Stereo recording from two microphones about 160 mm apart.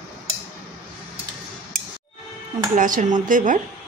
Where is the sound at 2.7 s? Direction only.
55° right (ahead or behind).